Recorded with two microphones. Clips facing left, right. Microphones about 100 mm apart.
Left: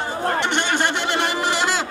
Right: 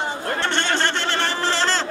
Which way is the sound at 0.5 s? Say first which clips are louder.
Left 1 dB; 15° left (ahead or behind).